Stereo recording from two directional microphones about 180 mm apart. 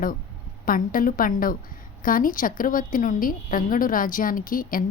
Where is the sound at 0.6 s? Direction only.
50° left (ahead or behind).